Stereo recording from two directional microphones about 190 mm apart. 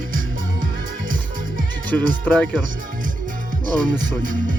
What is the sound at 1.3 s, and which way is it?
Music, 45° right (ahead or behind).